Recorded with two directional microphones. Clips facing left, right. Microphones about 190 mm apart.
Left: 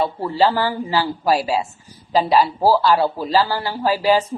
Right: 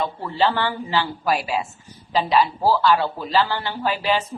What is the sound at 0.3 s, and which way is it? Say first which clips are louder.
Speech: left 3 dB; 35° left (ahead or behind).